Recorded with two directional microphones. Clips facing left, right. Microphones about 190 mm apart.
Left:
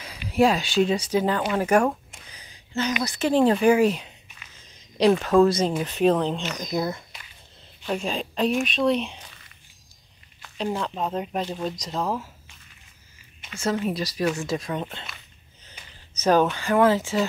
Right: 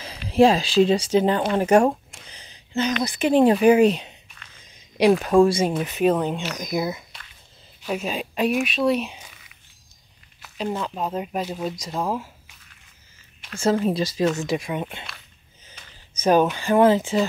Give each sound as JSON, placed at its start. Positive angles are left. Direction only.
{"t": 0.3, "sound": "speech", "side_deg": -30}
{"t": 2.3, "sound": "a sound", "side_deg": -25}
{"t": 3.0, "sound": "speech", "side_deg": -15}
{"t": 13.6, "sound": "speech", "side_deg": -30}
{"t": 15.0, "sound": "a sound", "side_deg": 0}
{"t": 16.2, "sound": "speech", "side_deg": -10}